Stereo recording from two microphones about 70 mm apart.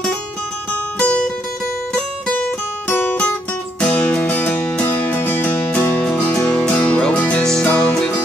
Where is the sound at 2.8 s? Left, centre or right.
Left.